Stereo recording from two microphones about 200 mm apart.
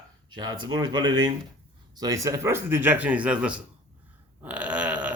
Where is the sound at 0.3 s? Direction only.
20° right (ahead or behind).